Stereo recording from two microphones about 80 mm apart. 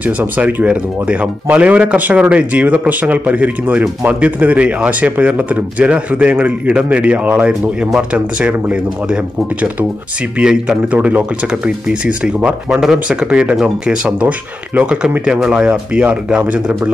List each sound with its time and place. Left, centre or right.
0.0 s speech: right
10.4 s speech: centre
10.9 s speech: centre